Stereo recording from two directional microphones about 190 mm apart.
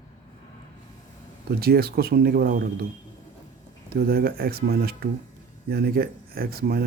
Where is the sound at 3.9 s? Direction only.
55° right (ahead or behind).